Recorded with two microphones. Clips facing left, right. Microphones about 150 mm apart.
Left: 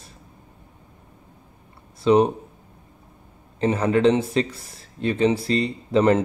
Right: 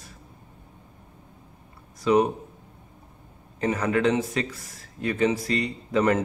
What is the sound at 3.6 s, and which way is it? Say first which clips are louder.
Speech: left 5 dB; 25° left (ahead or behind).